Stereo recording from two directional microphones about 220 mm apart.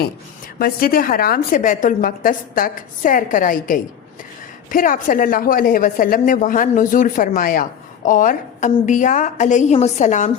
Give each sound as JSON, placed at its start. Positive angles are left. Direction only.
{"t": 0.6, "sound": "a woman's voice", "side_deg": 40}